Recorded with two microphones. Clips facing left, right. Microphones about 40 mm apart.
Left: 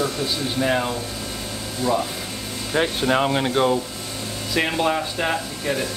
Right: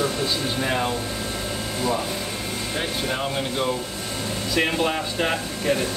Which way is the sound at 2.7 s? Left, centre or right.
Left.